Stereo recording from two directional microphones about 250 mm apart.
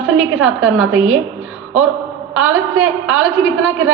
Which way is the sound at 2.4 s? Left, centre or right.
Right.